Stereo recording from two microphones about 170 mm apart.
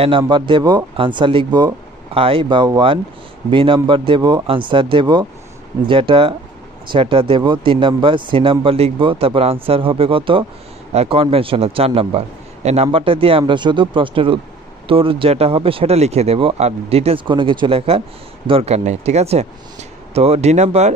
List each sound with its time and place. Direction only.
0.3 s speech: 30° right (ahead or behind)